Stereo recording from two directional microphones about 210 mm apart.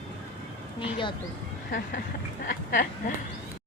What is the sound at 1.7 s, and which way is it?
Speech, 40° left (ahead or behind).